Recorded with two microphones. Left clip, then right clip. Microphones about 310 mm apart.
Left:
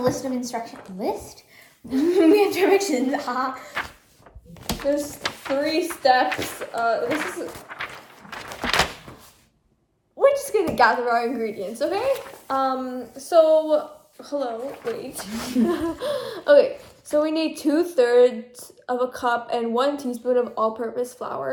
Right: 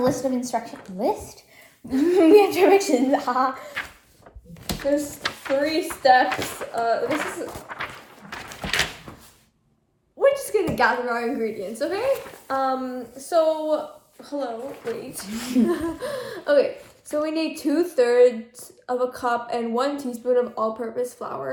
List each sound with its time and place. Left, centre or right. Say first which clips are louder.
0.0 s a woman's voice: right 1 dB; centre
4.6 s a woman's voice: even; centre
6.2 s a woman's voice: even; centre
6.7 s a woman's voice: even; centre
8.4 s a sound: left 3 dB; left
10.2 s a sound: left 1 dB; centre
10.7 s speech: left 5 dB; centre